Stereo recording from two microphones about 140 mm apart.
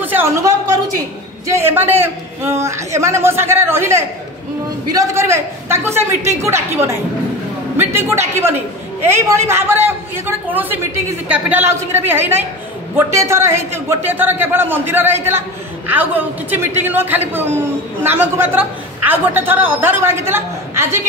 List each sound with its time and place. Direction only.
0.0 s a woman's voice: 15° right (ahead or behind)